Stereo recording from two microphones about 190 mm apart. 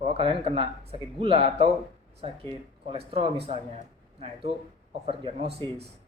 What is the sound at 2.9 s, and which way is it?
Speech, 30° right (ahead or behind).